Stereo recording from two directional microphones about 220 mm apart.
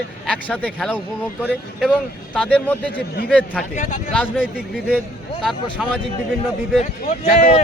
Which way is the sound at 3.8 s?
35° left (ahead or behind).